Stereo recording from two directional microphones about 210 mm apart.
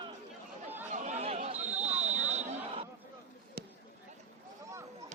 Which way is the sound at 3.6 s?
50° right (ahead or behind).